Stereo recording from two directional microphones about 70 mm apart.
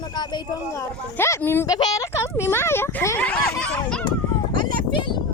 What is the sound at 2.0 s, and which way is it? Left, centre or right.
Speech, left.